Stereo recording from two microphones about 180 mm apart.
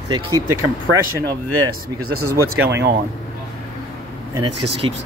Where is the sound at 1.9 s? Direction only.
60° right (ahead or behind).